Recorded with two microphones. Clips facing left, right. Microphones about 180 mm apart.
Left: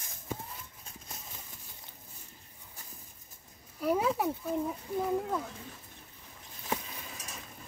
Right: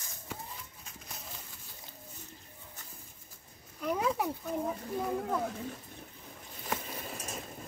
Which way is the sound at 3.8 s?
5° left (ahead or behind).